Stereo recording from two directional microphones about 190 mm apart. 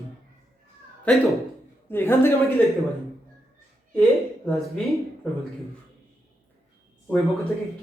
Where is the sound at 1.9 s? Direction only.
10° left (ahead or behind).